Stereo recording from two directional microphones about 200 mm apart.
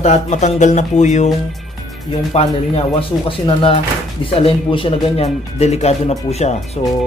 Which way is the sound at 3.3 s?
25° left (ahead or behind).